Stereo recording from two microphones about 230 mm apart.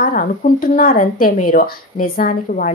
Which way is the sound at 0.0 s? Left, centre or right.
Left.